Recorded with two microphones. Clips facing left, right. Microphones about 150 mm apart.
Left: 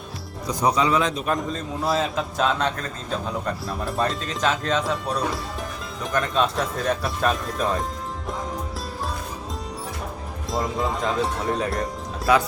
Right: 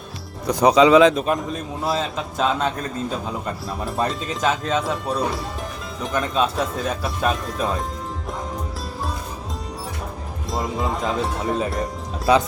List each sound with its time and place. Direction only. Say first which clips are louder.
0.4 s speech: right 7 dB; 75° right (ahead or behind)
1.8 s a man's voice: left 1 dB; centre (ahead or behind)
10.5 s a man's voice: even; centre (ahead or behind)